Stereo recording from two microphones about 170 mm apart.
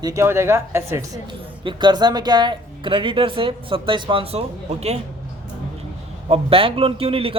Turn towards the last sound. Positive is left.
turn(degrees=-35)  # may be behind; listen again after turning